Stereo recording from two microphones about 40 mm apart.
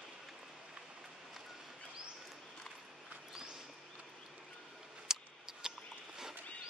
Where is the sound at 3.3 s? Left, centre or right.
Centre.